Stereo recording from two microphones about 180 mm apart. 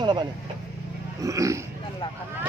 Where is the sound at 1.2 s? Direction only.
15° right (ahead or behind).